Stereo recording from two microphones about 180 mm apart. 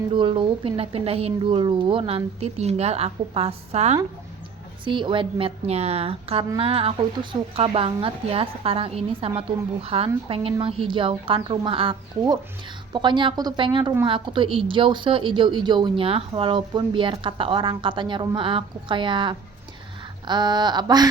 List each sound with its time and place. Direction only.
0.1 s a woman's voice: 30° right (ahead or behind)